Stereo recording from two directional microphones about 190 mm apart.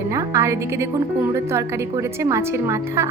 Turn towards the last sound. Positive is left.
turn(degrees=-15)  # may be behind; listen again after turning